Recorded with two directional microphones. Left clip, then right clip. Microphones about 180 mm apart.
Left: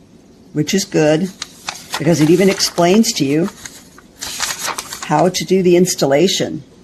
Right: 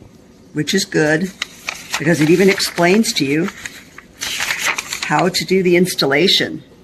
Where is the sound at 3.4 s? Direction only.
Centre (ahead or behind).